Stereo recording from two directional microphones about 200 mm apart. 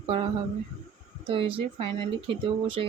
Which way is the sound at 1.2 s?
30° right (ahead or behind).